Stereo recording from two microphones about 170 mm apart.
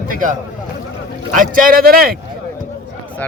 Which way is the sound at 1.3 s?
55° right (ahead or behind).